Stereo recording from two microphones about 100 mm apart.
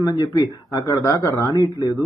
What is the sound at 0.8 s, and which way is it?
Speech, 30° left (ahead or behind).